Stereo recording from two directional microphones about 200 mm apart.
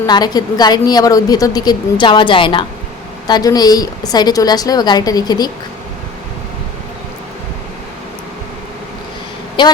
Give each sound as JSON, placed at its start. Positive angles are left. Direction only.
{"t": 0.0, "sound": "a woman's voice", "side_deg": 20}
{"t": 9.6, "sound": "a woman's voice", "side_deg": 25}